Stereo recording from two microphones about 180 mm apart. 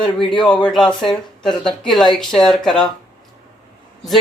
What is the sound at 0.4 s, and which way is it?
Speech, 5° left (ahead or behind).